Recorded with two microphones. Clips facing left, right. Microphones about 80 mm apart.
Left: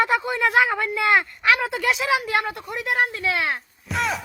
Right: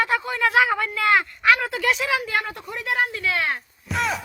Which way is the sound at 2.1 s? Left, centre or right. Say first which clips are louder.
Left 2 dB; centre.